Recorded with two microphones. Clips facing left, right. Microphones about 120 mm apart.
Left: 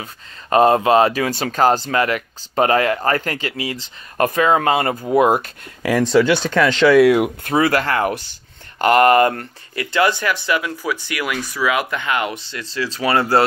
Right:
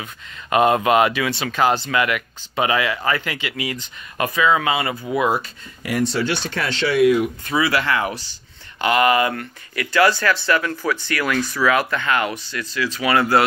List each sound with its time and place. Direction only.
0.0 s speech: 35° left (ahead or behind)
4.2 s speech: 50° left (ahead or behind)
5.8 s speech: 90° left
7.4 s speech: 50° left (ahead or behind)
9.9 s speech: 20° left (ahead or behind)